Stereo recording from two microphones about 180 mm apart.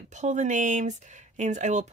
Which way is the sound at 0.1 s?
40° right (ahead or behind).